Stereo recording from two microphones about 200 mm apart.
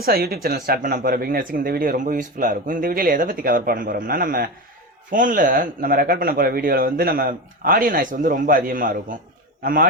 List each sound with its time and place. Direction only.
0.0 s speech: 50° right (ahead or behind)